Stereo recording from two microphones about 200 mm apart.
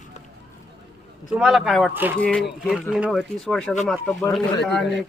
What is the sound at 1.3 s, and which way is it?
Speech, 5° right (ahead or behind).